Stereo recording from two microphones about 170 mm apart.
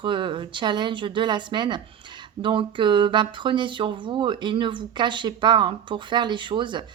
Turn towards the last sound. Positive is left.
turn(degrees=-30)  # may be behind; listen again after turning